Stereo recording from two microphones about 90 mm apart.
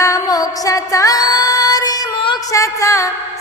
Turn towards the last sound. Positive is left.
turn(degrees=35)  # may be behind; listen again after turning